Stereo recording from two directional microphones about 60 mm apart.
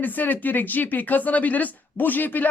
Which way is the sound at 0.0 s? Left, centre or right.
Left.